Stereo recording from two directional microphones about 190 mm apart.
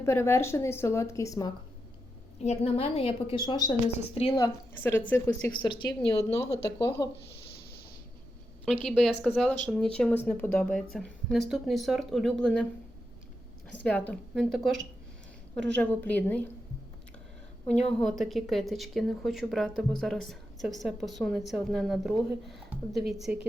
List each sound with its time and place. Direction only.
0.0 s a woman's voice: 15° left (ahead or behind)
2.4 s a woman's voice: 35° left (ahead or behind)
4.4 s a woman's voice: 15° left (ahead or behind)
5.5 s a woman's voice: 25° left (ahead or behind)
8.6 s a woman's voice: centre (ahead or behind)
13.8 s a woman's voice: 5° left (ahead or behind)
17.7 s a woman's voice: 5° left (ahead or behind)